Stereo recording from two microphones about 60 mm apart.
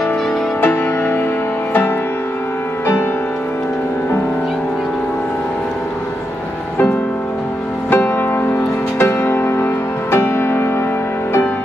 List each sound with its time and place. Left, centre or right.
0.6 s music: left
7.9 s music: left